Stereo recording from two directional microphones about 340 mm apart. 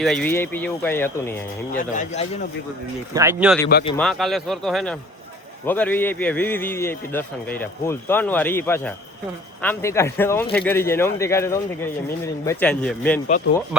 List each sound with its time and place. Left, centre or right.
0.0 s a man's voice: centre
1.7 s speech: left
3.2 s a man's voice: centre